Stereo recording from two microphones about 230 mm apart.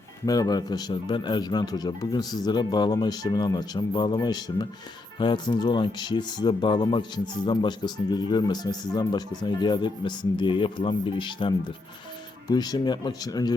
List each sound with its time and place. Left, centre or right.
0.3 s speech: centre